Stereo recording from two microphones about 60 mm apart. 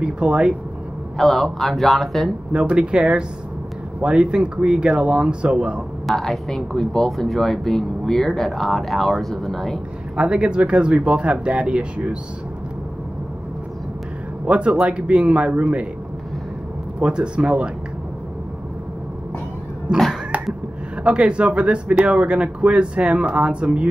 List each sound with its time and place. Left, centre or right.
0.0 s speech: centre
1.1 s speech: centre
2.5 s speech: centre
6.0 s speech: centre
10.1 s speech: centre
14.4 s speech: right
17.0 s speech: centre
19.9 s speech: centre